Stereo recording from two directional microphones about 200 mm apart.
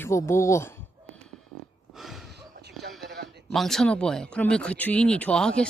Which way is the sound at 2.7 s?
Centre (ahead or behind).